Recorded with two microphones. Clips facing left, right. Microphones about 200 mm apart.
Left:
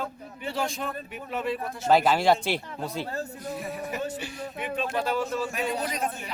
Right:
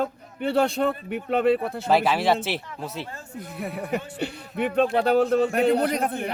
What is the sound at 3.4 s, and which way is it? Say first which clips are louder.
Speech: right 1 dB; 60° right (ahead or behind).